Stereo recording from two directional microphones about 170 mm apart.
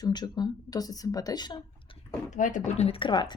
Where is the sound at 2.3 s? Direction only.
50° left (ahead or behind); by 3.3 s 25° left (ahead or behind).